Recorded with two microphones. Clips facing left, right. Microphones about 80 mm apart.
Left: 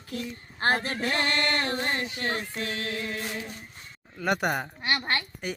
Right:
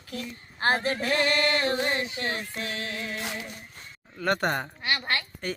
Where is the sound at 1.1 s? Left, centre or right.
Left.